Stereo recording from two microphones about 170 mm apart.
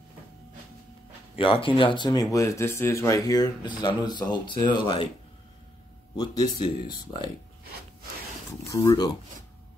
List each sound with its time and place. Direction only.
1.3 s speech: 30° left (ahead or behind)
6.1 s speech: 20° left (ahead or behind)
8.5 s speech: 20° left (ahead or behind)